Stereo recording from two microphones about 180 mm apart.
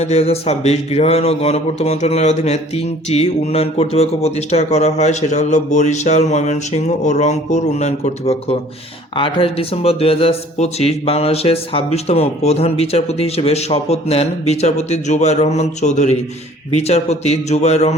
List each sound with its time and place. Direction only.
0.0 s speech: 35° left (ahead or behind)